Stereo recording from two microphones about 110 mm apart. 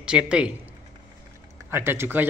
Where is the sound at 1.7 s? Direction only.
20° right (ahead or behind).